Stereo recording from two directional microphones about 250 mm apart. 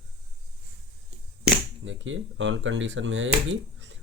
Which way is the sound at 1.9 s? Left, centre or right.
Right.